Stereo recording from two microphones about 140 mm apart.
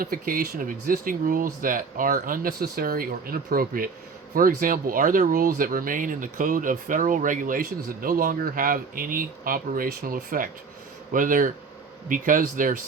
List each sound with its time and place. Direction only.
0.0 s speech: 90° right